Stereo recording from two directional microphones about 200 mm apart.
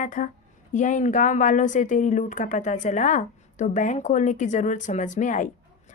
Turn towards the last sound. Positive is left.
turn(degrees=40)  # may be behind; listen again after turning